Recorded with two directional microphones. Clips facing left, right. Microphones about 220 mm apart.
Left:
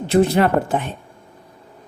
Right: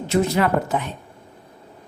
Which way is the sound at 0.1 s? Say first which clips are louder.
Left 4 dB; 30° left (ahead or behind).